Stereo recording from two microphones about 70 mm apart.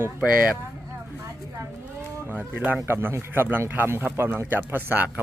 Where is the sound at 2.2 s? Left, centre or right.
Right.